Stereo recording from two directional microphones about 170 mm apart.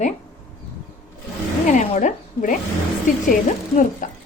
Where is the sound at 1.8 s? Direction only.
45° left (ahead or behind).